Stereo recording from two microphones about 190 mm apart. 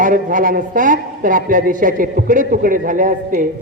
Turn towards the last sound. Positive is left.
turn(degrees=-45)  # may be behind; listen again after turning